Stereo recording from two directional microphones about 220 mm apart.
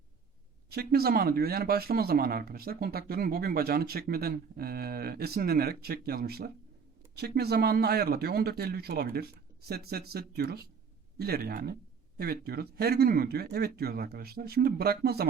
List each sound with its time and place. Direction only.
0.7 s speech: 45° right (ahead or behind)